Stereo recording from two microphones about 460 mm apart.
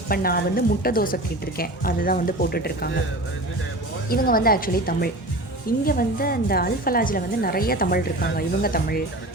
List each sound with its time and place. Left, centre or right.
0.1 s a woman's voice: centre
4.1 s a woman's voice: centre